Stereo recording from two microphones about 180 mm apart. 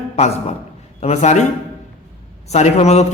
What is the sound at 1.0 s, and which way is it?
Speech, 40° left (ahead or behind).